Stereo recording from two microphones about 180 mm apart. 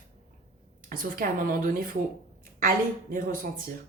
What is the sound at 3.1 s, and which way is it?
Speech, 50° right (ahead or behind).